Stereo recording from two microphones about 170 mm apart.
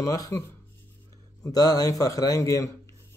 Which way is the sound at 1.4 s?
20° left (ahead or behind).